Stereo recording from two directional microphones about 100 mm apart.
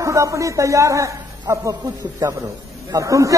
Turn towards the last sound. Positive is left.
turn(degrees=-35)  # may be behind; listen again after turning